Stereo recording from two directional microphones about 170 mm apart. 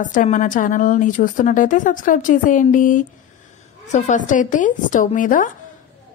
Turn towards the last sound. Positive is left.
turn(degrees=50)  # may be behind; listen again after turning